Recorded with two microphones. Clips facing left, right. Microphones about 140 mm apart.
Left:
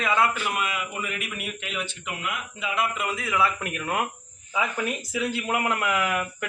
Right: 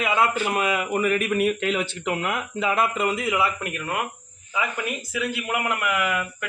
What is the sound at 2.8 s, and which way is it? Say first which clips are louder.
Speech: right 5 dB; 35° right (ahead or behind).